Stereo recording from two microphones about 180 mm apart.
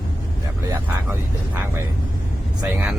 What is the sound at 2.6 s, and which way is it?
Speech, 15° right (ahead or behind).